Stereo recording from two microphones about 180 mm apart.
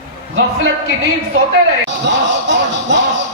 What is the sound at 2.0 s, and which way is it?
Music, 80° right.